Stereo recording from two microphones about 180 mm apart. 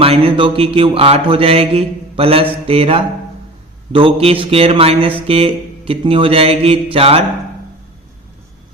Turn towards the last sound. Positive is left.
turn(degrees=-30)  # may be behind; listen again after turning